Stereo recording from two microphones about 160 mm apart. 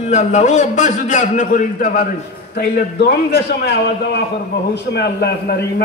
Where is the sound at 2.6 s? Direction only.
90° left.